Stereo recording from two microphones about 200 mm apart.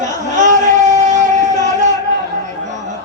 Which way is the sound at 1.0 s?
35° right (ahead or behind).